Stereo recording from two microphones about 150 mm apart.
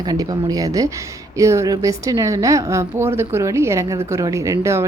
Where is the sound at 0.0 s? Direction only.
25° right (ahead or behind).